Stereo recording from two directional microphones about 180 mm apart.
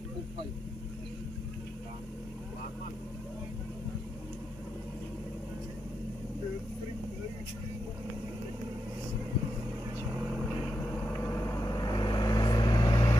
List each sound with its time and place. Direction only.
11.3 s vehicle: 20° left (ahead or behind)